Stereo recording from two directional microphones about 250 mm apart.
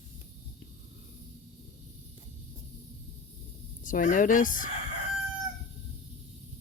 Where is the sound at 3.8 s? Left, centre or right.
Left.